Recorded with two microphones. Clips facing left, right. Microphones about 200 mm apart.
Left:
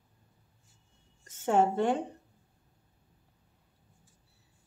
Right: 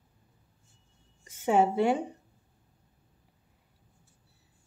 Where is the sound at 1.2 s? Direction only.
10° right (ahead or behind).